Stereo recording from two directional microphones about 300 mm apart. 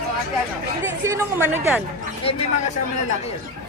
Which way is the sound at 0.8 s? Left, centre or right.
Centre.